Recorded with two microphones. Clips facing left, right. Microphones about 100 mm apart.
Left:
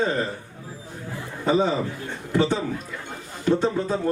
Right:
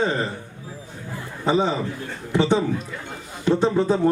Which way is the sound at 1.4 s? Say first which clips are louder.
Even; 20° right (ahead or behind).